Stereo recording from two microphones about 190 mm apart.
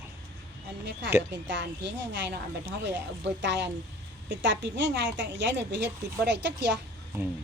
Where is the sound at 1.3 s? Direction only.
70° right (ahead or behind).